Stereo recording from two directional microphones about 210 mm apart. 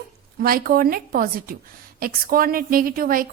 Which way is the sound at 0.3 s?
45° right (ahead or behind).